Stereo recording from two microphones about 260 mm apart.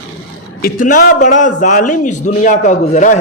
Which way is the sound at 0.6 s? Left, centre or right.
Left.